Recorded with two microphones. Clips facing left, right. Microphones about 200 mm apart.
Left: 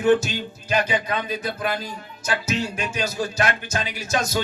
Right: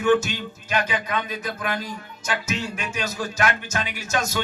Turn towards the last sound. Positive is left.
turn(degrees=35)  # may be behind; listen again after turning